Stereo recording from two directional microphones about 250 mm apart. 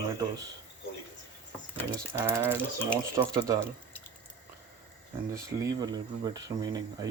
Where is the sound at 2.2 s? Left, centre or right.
Centre.